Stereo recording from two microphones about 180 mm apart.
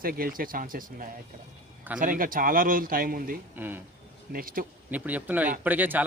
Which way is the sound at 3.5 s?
10° right (ahead or behind).